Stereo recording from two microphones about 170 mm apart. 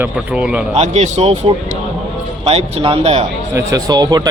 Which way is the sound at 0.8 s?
40° right (ahead or behind).